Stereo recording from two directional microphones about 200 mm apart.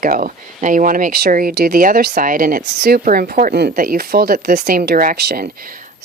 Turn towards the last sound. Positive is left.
turn(degrees=-45)  # may be behind; listen again after turning